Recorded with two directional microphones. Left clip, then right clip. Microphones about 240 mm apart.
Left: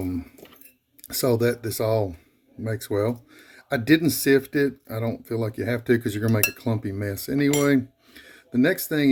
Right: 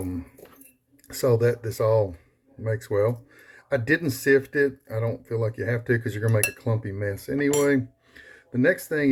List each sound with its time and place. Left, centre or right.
1.0 s speech: left